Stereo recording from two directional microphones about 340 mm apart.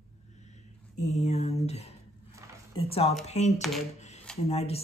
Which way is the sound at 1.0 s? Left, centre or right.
Centre.